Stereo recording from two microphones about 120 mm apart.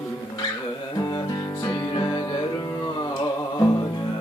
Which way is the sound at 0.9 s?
35° left (ahead or behind).